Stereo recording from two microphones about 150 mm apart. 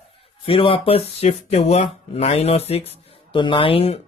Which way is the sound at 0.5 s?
35° left (ahead or behind).